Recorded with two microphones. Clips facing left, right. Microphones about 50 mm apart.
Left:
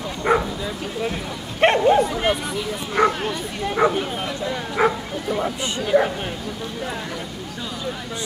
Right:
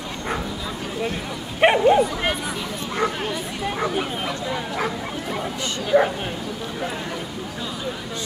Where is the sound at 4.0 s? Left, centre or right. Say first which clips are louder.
Even; centre.